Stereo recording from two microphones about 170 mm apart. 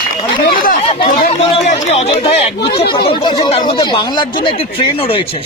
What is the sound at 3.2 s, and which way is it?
Speech, 25° left (ahead or behind).